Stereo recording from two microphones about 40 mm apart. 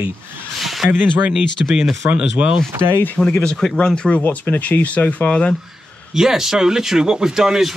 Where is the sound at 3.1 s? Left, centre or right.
Left.